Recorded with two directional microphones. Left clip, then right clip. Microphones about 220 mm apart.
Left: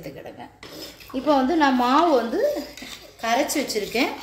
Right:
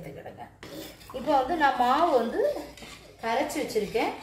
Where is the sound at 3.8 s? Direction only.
50° left (ahead or behind).